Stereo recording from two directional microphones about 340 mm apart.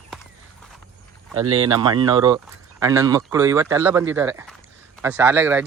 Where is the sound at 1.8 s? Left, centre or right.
Centre.